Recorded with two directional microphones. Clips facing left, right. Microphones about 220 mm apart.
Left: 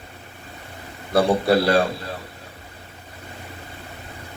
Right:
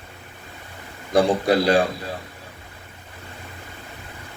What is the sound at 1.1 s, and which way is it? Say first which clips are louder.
Speech: even; 15° right (ahead or behind).